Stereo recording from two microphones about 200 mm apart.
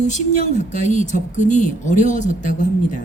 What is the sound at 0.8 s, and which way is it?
Speech, 35° left (ahead or behind).